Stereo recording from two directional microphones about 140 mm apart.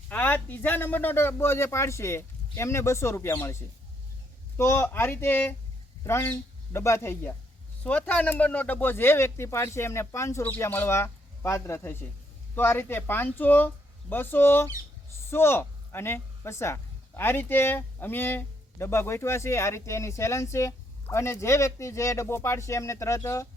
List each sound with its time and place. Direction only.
0.1 s a woman's voice: 10° left (ahead or behind)